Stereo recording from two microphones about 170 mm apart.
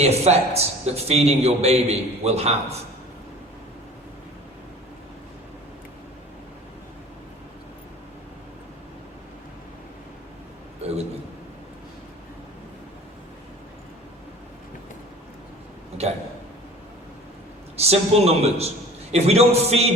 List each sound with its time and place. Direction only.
0.0 s a man's voice: 40° right (ahead or behind)
17.7 s a man's voice: 40° right (ahead or behind)